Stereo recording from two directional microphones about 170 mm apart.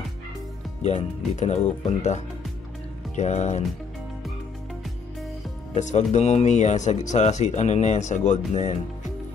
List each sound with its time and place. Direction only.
0.8 s speech: 40° left (ahead or behind)
5.8 s speech: 45° left (ahead or behind)